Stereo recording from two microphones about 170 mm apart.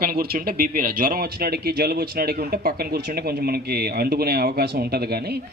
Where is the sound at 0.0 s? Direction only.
65° right (ahead or behind).